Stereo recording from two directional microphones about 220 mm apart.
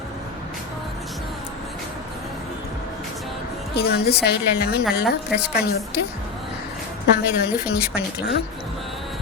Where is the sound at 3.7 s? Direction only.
45° left (ahead or behind).